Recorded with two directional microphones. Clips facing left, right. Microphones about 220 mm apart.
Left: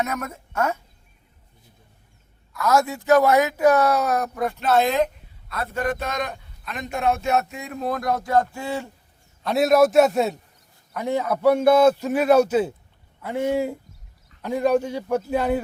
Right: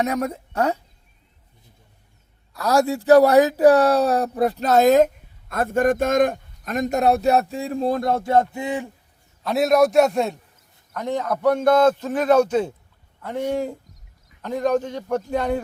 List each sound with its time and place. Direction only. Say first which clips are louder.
0.0 s speech: right 5 dB; 30° right (ahead or behind)
2.5 s speech: right 2 dB; 35° right (ahead or behind); by 8.9 s 15° right (ahead or behind)
9.4 s a man's voice: even; centre (ahead or behind)